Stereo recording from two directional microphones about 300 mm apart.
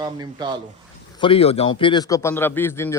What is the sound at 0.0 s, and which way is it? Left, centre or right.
Speech, centre.